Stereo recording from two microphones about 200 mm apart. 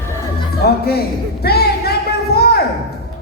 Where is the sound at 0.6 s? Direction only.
50° left (ahead or behind).